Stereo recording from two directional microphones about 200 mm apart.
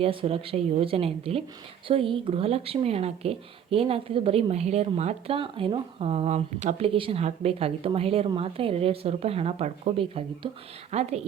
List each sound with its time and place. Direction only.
0.0 s a woman's voice: 30° right (ahead or behind)